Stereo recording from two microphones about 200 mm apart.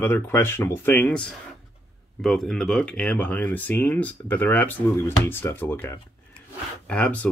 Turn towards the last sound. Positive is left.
turn(degrees=5)  # may be behind; listen again after turning